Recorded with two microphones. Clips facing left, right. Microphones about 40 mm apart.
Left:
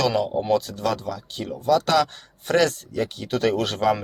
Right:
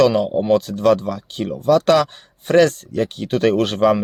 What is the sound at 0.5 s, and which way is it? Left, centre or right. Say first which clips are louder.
Speech: right 9 dB; right.